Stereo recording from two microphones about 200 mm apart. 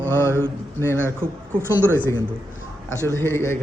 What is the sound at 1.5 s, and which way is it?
Speech, 10° right (ahead or behind).